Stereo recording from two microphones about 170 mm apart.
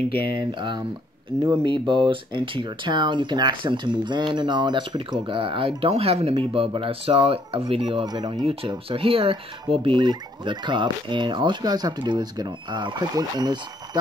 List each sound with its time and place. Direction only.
0.6 s speech: 30° right (ahead or behind)